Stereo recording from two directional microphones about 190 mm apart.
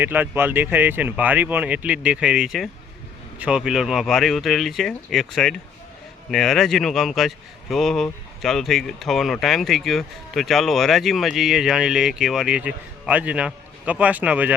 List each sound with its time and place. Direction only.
0.0 s speech: 10° right (ahead or behind)